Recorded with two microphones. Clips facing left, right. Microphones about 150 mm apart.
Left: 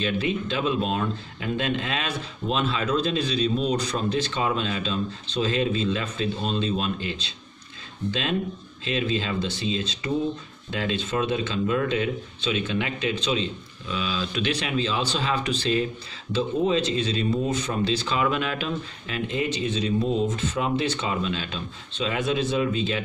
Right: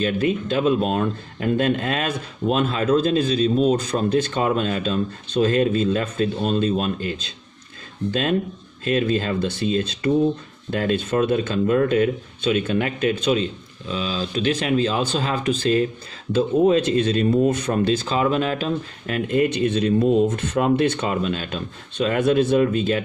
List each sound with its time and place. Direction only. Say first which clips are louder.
0.0 s speech: right 5 dB; 45° right (ahead or behind)
13.8 s speech: right 3 dB; 40° right (ahead or behind)